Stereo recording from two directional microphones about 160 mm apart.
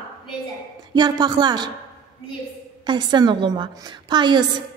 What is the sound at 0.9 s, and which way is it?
Speech, 25° right (ahead or behind).